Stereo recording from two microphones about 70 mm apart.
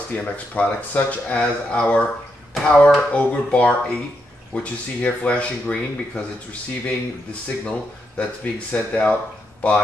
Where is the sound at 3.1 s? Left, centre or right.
Centre.